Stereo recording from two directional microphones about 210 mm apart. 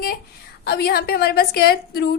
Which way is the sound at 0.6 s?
50° left (ahead or behind).